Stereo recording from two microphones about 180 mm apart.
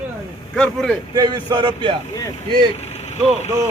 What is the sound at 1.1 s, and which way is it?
Speech, 20° right (ahead or behind).